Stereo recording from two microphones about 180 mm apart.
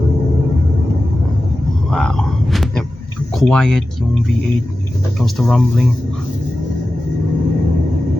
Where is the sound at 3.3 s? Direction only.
5° left (ahead or behind).